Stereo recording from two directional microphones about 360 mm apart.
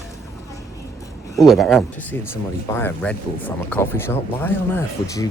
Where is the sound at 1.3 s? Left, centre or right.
Centre.